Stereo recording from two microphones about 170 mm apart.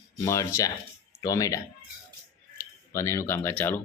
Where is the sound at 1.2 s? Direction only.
20° left (ahead or behind).